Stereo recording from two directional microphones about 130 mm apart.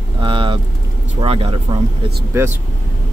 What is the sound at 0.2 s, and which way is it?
Speech, 40° right (ahead or behind).